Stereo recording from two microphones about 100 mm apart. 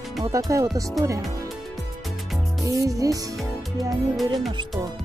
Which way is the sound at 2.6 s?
35° right (ahead or behind).